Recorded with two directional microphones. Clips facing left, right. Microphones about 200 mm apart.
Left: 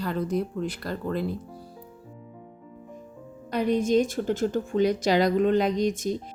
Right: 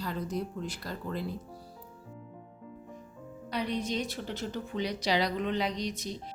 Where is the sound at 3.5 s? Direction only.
50° left (ahead or behind).